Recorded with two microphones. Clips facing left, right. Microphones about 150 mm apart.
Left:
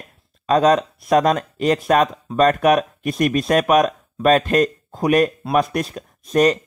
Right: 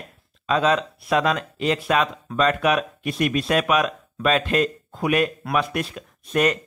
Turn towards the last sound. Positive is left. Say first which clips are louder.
# left 5 dB
turn(degrees=35)  # may be behind; listen again after turning